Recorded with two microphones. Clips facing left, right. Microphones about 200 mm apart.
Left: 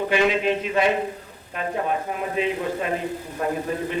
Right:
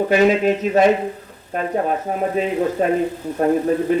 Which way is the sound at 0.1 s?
40° right (ahead or behind).